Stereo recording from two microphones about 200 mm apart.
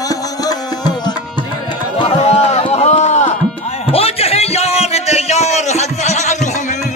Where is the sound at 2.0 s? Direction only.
30° left (ahead or behind).